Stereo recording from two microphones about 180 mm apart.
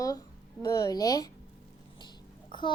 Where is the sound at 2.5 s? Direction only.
25° left (ahead or behind).